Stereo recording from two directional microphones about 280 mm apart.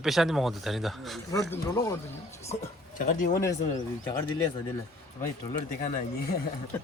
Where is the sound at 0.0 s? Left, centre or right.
Centre.